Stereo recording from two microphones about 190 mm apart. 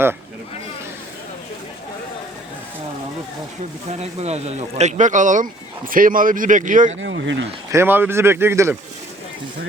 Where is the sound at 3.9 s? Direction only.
35° right (ahead or behind).